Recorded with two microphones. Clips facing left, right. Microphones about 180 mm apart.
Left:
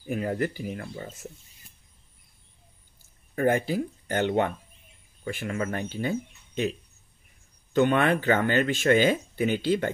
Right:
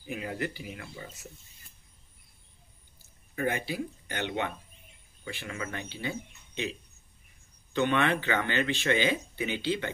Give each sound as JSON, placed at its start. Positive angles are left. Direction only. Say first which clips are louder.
{"t": 0.0, "sound": "speech", "louder": "left 7 dB", "side_deg": 45}
{"t": 3.3, "sound": "speech", "louder": "left 7 dB", "side_deg": 45}
{"t": 7.7, "sound": "speech", "louder": "left 5 dB", "side_deg": 45}